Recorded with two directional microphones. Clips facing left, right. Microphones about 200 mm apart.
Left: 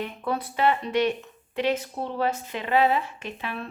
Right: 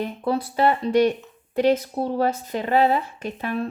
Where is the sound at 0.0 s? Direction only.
35° right (ahead or behind).